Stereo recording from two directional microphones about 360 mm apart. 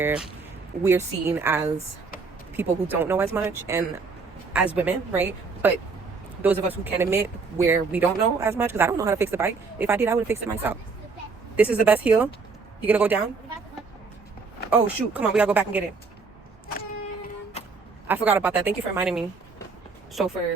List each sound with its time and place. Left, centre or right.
0.0 s speech: centre
14.7 s speech: centre
17.6 s vehicle: centre
18.1 s speech: centre